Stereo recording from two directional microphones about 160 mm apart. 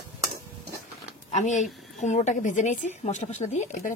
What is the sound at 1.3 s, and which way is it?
A woman's voice, 50° left (ahead or behind).